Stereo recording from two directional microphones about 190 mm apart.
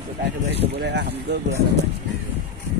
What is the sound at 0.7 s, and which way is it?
Speech, 60° right (ahead or behind).